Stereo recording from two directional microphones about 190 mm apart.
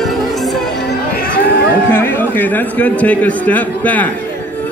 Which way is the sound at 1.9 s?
10° left (ahead or behind).